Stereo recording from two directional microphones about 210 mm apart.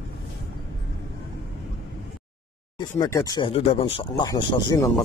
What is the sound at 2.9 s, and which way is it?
Speech, 15° left (ahead or behind).